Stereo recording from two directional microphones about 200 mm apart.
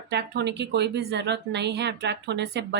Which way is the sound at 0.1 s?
55° right (ahead or behind).